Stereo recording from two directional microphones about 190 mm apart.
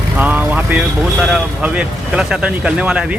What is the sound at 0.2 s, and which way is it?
Speech, 10° right (ahead or behind).